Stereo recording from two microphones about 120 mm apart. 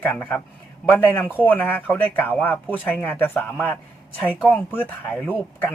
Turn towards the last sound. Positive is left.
turn(degrees=15)  # may be behind; listen again after turning